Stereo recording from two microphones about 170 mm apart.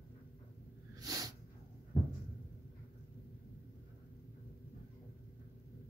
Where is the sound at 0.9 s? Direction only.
20° right (ahead or behind).